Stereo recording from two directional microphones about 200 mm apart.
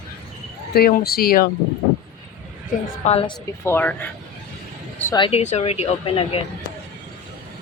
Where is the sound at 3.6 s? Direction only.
10° left (ahead or behind).